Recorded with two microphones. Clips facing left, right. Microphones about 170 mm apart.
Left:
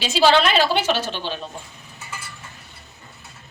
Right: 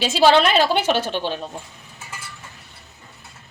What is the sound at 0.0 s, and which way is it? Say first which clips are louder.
A woman's voice: right 2 dB; 55° right (ahead or behind).